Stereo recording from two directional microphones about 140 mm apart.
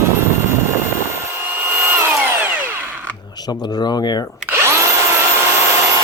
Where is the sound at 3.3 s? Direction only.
30° left (ahead or behind).